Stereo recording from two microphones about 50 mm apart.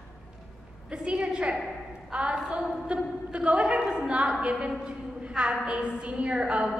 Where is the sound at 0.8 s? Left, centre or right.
Right.